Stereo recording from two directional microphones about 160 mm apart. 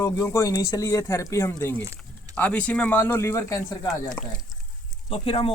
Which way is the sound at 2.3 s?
10° left (ahead or behind).